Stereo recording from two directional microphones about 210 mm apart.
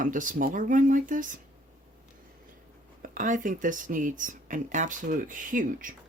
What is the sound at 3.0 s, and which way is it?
Speech, 40° right (ahead or behind).